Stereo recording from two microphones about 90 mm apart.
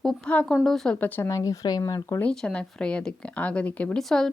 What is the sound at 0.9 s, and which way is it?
Speech, 20° left (ahead or behind).